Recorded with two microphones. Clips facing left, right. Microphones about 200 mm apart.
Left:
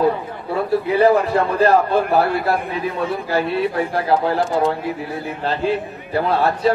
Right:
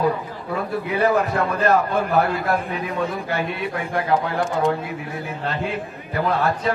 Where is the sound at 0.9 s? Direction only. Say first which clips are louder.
Left 4 dB; 30° left (ahead or behind).